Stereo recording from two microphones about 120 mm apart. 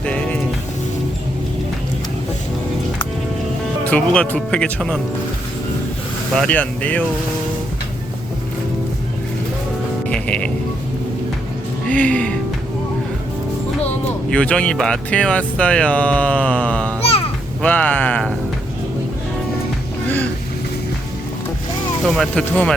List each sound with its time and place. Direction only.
0.0 s music: 10° left (ahead or behind)
3.8 s speech: 10° left (ahead or behind)
6.3 s speech: 5° left (ahead or behind)
10.1 s speech: 10° left (ahead or behind)
11.9 s speech: 10° left (ahead or behind)
14.3 s speech: 10° left (ahead or behind)
17.0 s a sound: 55° left (ahead or behind)
17.6 s speech: 10° left (ahead or behind)
20.1 s speech: 15° left (ahead or behind)
22.0 s speech: 5° left (ahead or behind)